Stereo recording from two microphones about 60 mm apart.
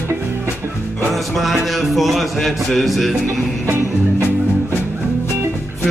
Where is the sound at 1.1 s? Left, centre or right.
Centre.